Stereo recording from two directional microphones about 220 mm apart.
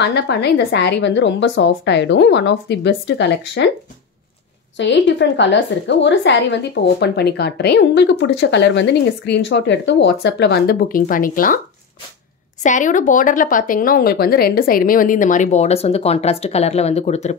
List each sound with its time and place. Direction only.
0.0 s a woman's voice: 50° left (ahead or behind)
4.7 s a woman's voice: 55° left (ahead or behind); by 11.6 s 40° left (ahead or behind)
12.6 s a woman's voice: 35° left (ahead or behind)